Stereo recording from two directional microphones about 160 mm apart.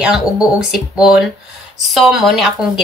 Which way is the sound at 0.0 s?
5° right (ahead or behind).